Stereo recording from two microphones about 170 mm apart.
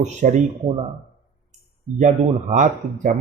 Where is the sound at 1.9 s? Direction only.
45° right (ahead or behind).